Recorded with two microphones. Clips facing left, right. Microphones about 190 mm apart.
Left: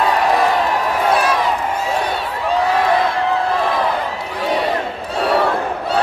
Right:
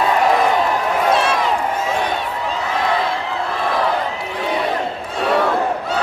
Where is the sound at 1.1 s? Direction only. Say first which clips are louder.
Left 2 dB; 25° right (ahead or behind).